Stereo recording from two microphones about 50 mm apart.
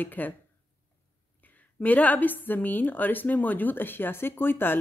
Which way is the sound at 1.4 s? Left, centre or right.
Left.